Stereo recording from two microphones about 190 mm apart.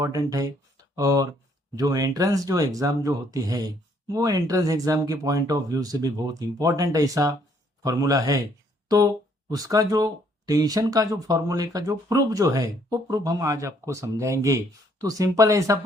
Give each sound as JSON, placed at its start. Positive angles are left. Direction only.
{"t": 0.0, "sound": "a man's voice", "side_deg": -20}
{"t": 9.5, "sound": "speech", "side_deg": -20}